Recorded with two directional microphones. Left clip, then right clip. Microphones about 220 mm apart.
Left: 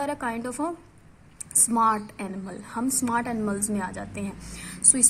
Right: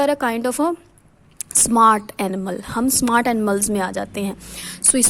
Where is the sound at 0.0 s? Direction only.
40° right (ahead or behind).